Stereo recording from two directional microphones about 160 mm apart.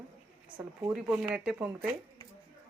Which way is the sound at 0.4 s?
10° right (ahead or behind).